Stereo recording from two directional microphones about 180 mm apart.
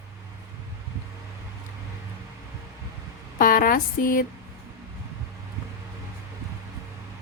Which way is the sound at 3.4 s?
50° left (ahead or behind).